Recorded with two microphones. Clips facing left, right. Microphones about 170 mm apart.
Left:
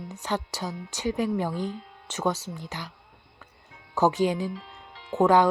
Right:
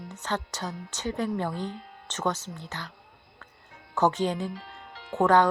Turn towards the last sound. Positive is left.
turn(degrees=10)  # may be behind; listen again after turning